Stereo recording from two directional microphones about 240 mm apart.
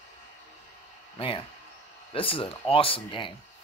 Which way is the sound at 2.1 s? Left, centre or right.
Left.